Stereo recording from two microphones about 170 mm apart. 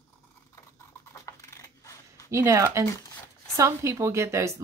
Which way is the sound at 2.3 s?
15° right (ahead or behind).